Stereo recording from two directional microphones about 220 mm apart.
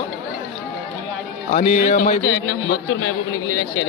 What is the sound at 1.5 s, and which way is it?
Speech, 35° left (ahead or behind).